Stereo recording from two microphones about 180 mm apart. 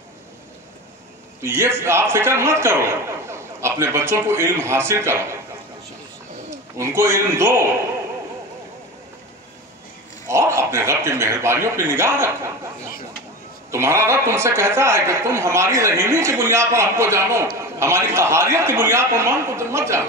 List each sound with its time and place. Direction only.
1.4 s a woman's voice: 10° right (ahead or behind)
6.8 s a woman's voice: 15° right (ahead or behind)
10.2 s speech: 15° right (ahead or behind)
13.7 s a woman's voice: 15° right (ahead or behind)